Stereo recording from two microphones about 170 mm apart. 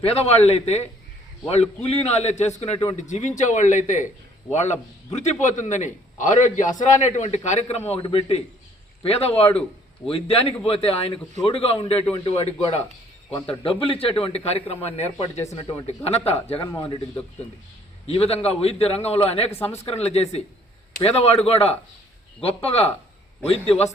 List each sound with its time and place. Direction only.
0.0 s a man's voice: 40° left (ahead or behind)
13.3 s a man's voice: 25° left (ahead or behind)
15.5 s a man's voice: 25° left (ahead or behind)
16.0 s a man's voice: 35° left (ahead or behind)
18.0 s a man's voice: 35° left (ahead or behind)
19.5 s speech: 15° left (ahead or behind)
19.8 s a man's voice: 35° left (ahead or behind)